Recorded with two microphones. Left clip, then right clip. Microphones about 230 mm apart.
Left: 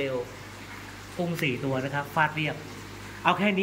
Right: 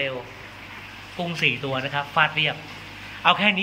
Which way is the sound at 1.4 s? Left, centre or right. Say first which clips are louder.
Right 7 dB; centre.